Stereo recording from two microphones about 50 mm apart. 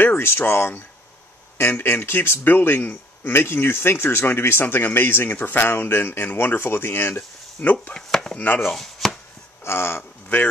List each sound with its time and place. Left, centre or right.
0.0 s speech: left
7.6 s chopping: left
8.1 s chopping: centre
8.4 s chopping: left
8.6 s chopping: centre
9.7 s speech: left